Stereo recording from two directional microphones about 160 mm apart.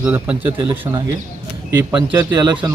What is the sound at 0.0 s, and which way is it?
Speech, 10° right (ahead or behind).